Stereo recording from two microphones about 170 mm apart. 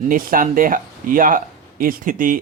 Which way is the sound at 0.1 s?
55° right (ahead or behind).